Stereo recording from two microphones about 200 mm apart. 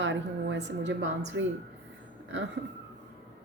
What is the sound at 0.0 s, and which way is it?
A woman's voice, 65° right (ahead or behind).